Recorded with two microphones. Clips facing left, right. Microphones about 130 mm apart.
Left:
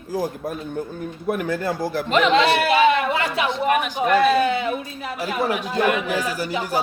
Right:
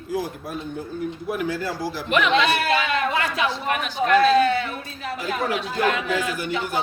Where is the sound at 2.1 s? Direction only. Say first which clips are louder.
Left 3 dB; 30° left (ahead or behind).